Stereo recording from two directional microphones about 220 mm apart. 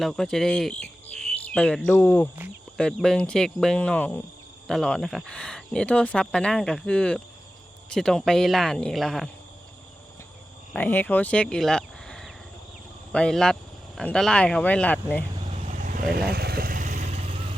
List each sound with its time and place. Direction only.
0.0 s speech: centre (ahead or behind)
10.7 s speech: 5° left (ahead or behind)
15.6 s vehicle: 35° right (ahead or behind)